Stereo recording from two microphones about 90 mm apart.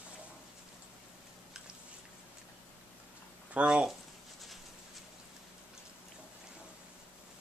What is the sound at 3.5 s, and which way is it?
Speech, 15° right (ahead or behind).